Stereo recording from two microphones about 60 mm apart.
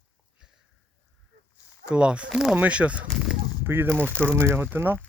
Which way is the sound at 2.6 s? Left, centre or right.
Right.